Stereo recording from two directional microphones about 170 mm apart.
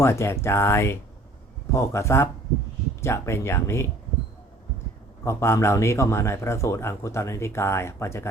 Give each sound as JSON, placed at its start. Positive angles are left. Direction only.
{"t": 0.0, "sound": "a man's voice", "side_deg": 15}
{"t": 5.2, "sound": "a man's voice", "side_deg": 15}